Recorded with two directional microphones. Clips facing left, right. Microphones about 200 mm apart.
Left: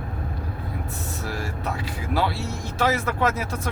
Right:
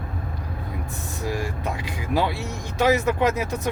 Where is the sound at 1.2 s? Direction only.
15° right (ahead or behind).